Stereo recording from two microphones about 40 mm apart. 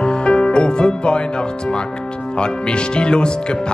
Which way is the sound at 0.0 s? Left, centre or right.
Left.